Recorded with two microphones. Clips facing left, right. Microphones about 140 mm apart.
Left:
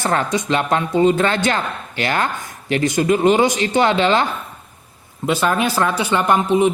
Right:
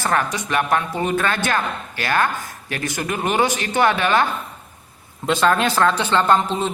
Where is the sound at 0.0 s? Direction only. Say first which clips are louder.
Left 2 dB; 20° left (ahead or behind).